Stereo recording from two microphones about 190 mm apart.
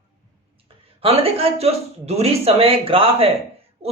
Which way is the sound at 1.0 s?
30° right (ahead or behind).